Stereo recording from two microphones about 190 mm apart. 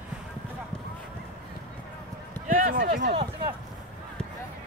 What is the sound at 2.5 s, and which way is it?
Speech, 45° right (ahead or behind).